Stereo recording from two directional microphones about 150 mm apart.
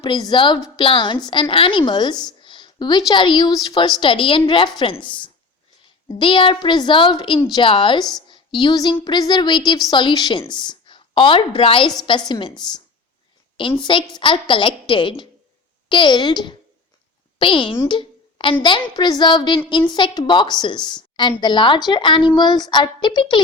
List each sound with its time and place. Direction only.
0.0 s a woman's voice: 30° left (ahead or behind)
17.8 s a sound: 35° left (ahead or behind)
18.6 s a woman's voice: 30° left (ahead or behind)